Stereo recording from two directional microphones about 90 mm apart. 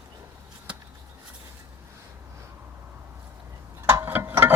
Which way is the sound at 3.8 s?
30° right (ahead or behind).